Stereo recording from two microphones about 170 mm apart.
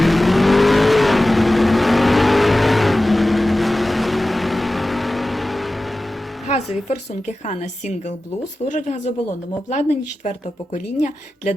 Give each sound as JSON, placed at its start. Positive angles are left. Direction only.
{"t": 0.0, "sound": "vehicle", "side_deg": 0}
{"t": 7.4, "sound": "speech", "side_deg": 45}